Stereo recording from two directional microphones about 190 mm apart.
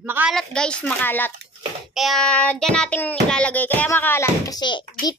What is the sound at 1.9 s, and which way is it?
Child singing, centre (ahead or behind).